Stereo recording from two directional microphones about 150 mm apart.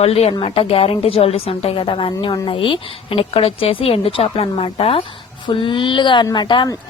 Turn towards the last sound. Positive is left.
turn(degrees=30)  # may be behind; listen again after turning